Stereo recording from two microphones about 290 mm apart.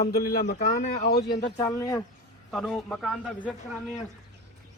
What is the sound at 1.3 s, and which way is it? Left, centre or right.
A man's voice, centre.